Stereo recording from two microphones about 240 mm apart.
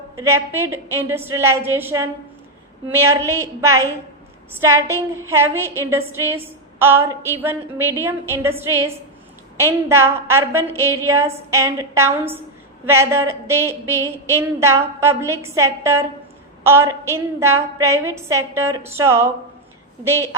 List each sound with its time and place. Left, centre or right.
0.2 s a woman's voice: centre